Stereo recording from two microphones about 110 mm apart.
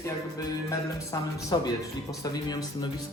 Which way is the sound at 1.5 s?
35° left (ahead or behind).